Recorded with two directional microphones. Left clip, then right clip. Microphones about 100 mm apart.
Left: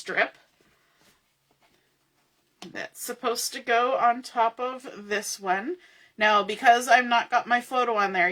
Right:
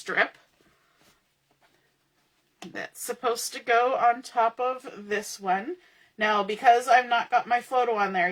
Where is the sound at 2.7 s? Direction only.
30° left (ahead or behind).